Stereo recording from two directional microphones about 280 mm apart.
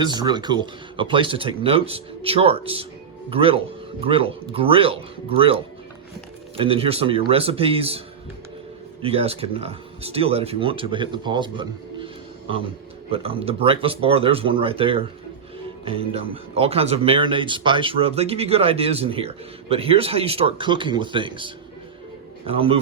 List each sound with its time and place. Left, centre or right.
0.0 s speech: centre
12.0 s a sound: centre
13.1 s speech: centre